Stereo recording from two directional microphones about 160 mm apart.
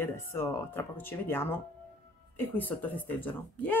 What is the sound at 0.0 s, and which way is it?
A woman's voice, 15° left (ahead or behind).